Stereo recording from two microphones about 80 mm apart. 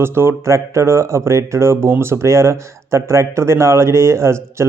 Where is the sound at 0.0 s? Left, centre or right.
Right.